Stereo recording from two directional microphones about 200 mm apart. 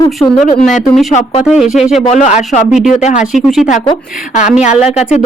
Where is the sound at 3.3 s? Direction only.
Centre (ahead or behind).